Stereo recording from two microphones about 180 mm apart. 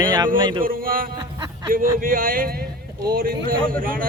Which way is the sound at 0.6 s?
50° right (ahead or behind).